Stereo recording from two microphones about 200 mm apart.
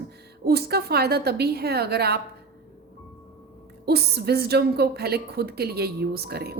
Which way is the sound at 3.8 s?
55° right (ahead or behind).